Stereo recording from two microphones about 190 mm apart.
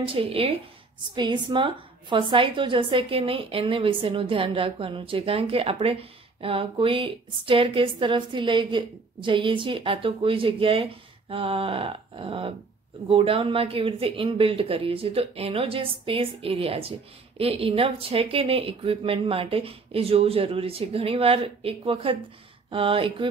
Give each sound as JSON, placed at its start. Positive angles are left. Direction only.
{"t": 0.0, "sound": "a woman's voice", "side_deg": -30}